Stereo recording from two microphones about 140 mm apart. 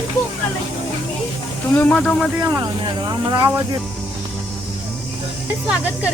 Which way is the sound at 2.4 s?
20° right (ahead or behind).